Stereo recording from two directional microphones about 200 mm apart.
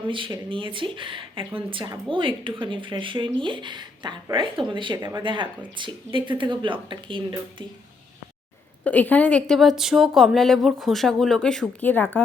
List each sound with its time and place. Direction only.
0.1 s speech: 25° right (ahead or behind)
8.8 s a woman's voice: 5° left (ahead or behind)